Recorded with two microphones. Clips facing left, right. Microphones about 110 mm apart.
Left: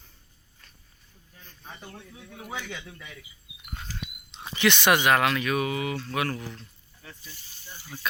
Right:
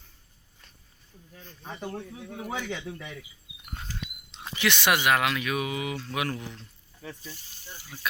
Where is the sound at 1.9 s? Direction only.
35° right (ahead or behind).